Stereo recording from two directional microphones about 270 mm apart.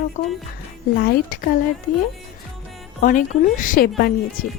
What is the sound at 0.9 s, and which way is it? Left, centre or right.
Speech, left.